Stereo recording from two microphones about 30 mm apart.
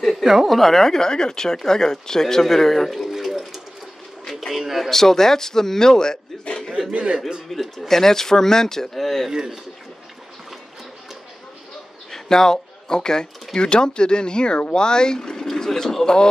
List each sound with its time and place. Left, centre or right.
0.2 s speech: centre
0.5 s speech: centre
3.1 s a sound: centre
4.3 s bird: centre
4.6 s a sound: centre
4.8 s speech: centre
6.9 s a man's voice: right
7.5 s speech: centre
9.3 s speech: right
12.1 s speech: centre
15.5 s a sound: centre